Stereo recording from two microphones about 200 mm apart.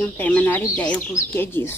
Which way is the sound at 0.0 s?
10° left (ahead or behind).